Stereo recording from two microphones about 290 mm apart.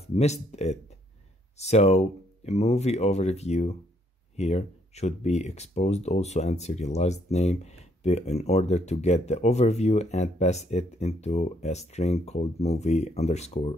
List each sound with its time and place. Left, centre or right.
0.0 s speech: left